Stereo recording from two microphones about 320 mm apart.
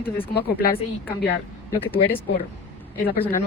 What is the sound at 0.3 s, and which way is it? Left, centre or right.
Speech, left.